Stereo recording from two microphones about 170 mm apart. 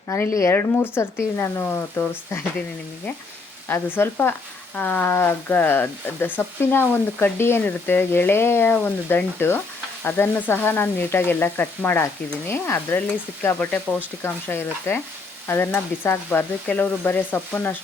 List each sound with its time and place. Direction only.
0.3 s speech: 15° left (ahead or behind)
3.7 s speech: 10° left (ahead or behind)